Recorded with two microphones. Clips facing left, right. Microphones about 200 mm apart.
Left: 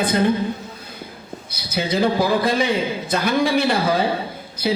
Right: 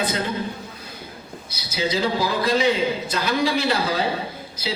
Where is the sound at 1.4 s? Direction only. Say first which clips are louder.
Left 2 dB; 55° left (ahead or behind).